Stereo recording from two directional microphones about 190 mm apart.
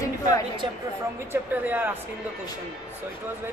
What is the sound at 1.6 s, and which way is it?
Speech, 10° right (ahead or behind).